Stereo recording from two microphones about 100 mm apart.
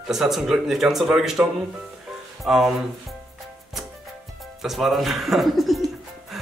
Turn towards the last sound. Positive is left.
turn(degrees=0)  # may be behind; listen again after turning